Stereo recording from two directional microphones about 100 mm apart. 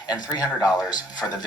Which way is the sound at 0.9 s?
45° left (ahead or behind).